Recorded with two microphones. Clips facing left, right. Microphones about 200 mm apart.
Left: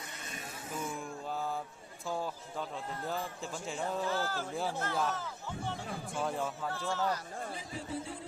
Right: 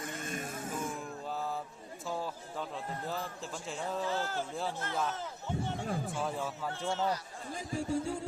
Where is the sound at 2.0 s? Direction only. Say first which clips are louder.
Left 1 dB; centre (ahead or behind).